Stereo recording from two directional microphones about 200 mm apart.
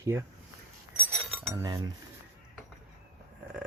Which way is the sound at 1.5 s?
20° right (ahead or behind).